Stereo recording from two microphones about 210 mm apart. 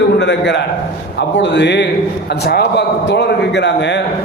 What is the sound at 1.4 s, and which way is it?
A man's voice, 55° left (ahead or behind).